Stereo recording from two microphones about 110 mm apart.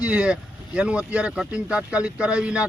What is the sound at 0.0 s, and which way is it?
Speech, 10° right (ahead or behind).